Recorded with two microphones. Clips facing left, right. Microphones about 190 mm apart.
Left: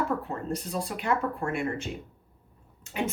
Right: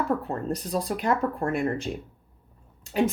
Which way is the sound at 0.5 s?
40° right (ahead or behind).